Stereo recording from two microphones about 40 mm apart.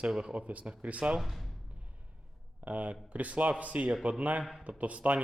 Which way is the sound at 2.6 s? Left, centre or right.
Right.